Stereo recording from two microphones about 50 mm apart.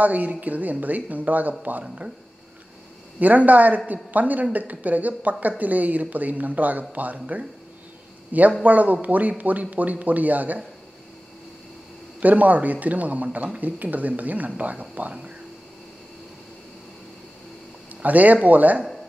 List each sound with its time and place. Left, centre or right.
0.0 s speech: right
3.2 s a man's voice: right
12.2 s speech: right
18.0 s speech: right